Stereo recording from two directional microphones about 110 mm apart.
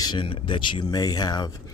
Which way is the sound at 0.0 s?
45° left (ahead or behind).